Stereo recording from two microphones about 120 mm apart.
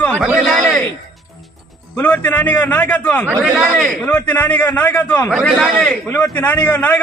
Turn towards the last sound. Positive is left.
turn(degrees=10)  # may be behind; listen again after turning